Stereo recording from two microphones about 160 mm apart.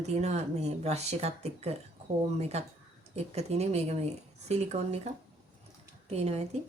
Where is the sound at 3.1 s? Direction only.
40° right (ahead or behind).